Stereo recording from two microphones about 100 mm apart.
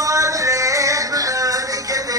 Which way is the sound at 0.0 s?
35° right (ahead or behind).